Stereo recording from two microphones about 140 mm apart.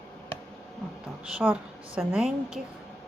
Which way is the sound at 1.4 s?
5° right (ahead or behind).